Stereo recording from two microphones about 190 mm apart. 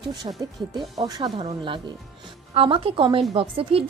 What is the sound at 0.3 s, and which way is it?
A woman's voice, 25° right (ahead or behind).